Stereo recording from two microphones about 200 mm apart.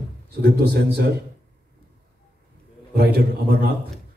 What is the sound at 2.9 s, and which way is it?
Speech, 50° right (ahead or behind).